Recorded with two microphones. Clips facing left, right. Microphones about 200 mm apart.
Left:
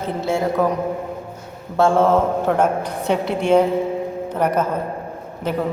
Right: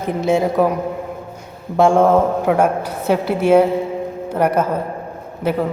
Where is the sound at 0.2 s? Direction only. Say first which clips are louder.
Right 4 dB; 20° right (ahead or behind).